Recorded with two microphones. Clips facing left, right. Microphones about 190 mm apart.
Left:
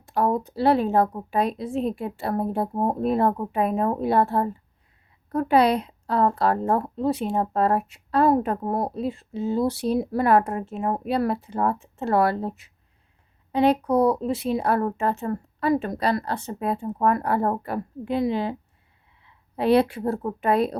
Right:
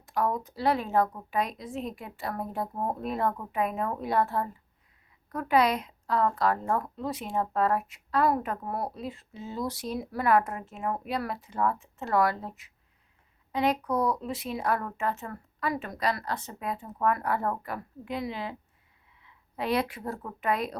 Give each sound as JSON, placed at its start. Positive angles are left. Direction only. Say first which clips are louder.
{"t": 0.1, "sound": "a woman's voice", "louder": "left 6 dB", "side_deg": 30}